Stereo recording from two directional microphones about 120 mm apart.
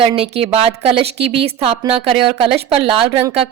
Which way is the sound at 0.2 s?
55° right (ahead or behind).